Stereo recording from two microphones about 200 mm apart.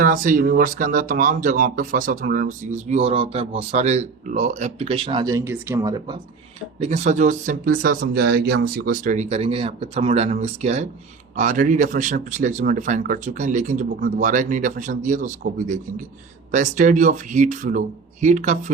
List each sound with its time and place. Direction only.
0.0 s speech: 40° right (ahead or behind); by 6.1 s 20° right (ahead or behind)
6.7 s speech: 35° right (ahead or behind)